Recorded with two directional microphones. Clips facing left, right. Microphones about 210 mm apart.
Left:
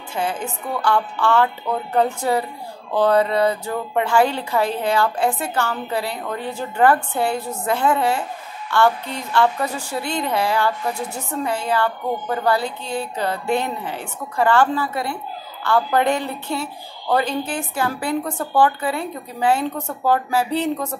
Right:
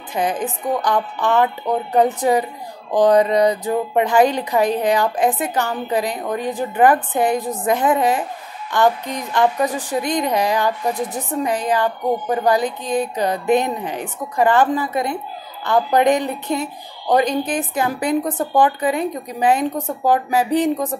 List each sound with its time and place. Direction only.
0.1 s speech: 15° right (ahead or behind)